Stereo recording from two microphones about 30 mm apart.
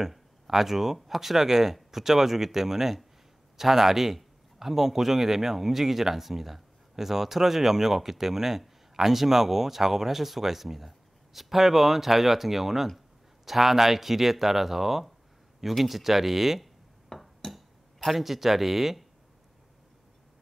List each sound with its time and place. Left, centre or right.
0.5 s a man's voice: centre
17.1 s a sound: centre
17.9 s a man's voice: centre